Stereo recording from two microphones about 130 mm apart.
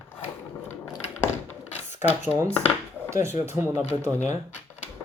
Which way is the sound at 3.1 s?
20° right (ahead or behind).